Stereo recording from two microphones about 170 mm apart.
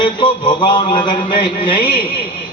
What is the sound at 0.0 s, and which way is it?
Mantra, 25° left (ahead or behind).